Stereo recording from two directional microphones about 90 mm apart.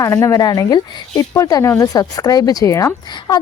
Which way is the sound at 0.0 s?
40° left (ahead or behind).